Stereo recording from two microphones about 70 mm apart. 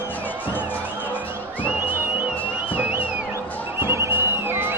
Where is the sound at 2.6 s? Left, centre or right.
Right.